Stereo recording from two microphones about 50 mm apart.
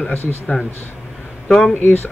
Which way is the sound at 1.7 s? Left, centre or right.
Left.